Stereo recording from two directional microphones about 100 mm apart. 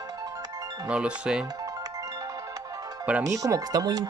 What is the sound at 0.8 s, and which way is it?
Speech, 10° right (ahead or behind).